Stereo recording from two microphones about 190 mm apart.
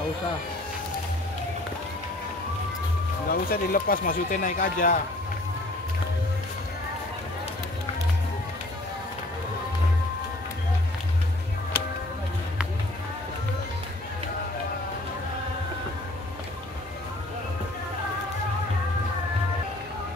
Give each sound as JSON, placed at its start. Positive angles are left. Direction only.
{"t": 3.3, "sound": "speech", "side_deg": 50}